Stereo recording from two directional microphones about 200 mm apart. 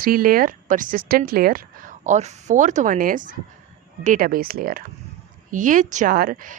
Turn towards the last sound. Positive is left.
turn(degrees=-45)  # may be behind; listen again after turning